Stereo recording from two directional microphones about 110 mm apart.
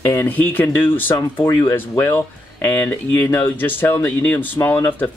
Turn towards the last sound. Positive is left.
turn(degrees=20)  # may be behind; listen again after turning